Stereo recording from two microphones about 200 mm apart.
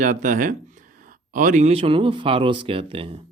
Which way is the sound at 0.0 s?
40° right (ahead or behind).